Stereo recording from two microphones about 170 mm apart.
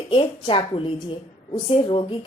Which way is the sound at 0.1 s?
30° left (ahead or behind).